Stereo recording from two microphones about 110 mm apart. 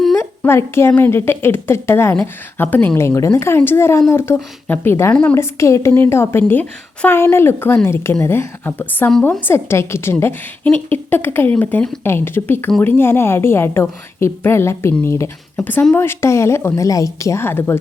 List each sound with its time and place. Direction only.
0.2 s a woman's voice: 20° left (ahead or behind)
5.4 s a woman's voice: 25° left (ahead or behind)